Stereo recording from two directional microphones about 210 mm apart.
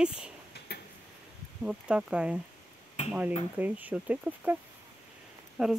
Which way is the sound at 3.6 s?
10° right (ahead or behind).